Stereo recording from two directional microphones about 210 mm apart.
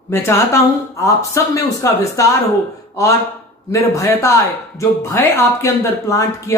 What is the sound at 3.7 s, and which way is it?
Speech, 15° left (ahead or behind).